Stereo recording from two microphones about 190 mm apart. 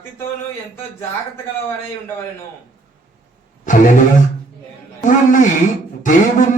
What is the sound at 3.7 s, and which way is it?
Speech, 40° left (ahead or behind).